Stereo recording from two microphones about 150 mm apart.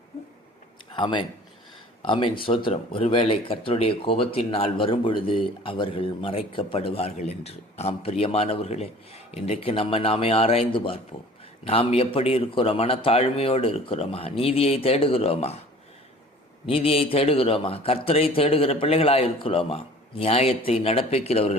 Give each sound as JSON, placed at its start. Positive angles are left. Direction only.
{"t": 0.9, "sound": "speech", "side_deg": 30}
{"t": 16.6, "sound": "speech", "side_deg": 40}